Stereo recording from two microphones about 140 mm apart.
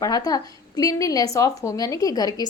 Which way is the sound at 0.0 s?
25° left (ahead or behind).